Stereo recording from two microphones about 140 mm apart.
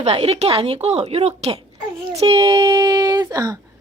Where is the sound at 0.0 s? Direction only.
50° right (ahead or behind).